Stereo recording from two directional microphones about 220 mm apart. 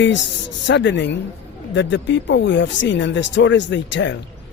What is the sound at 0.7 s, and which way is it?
Speech, 55° left (ahead or behind).